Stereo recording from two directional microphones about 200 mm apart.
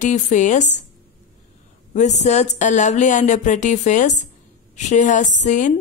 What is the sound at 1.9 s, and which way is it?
Speech, 35° left (ahead or behind).